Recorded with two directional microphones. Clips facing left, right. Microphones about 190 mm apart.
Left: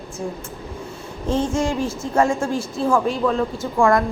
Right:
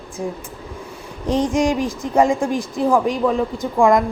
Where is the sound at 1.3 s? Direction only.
15° right (ahead or behind).